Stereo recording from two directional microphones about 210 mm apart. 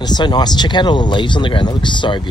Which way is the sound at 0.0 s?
20° left (ahead or behind).